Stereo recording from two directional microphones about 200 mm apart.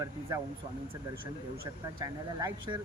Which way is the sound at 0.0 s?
15° right (ahead or behind).